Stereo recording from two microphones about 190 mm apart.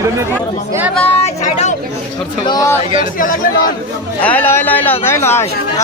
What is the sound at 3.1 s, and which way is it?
Speech, 45° left (ahead or behind).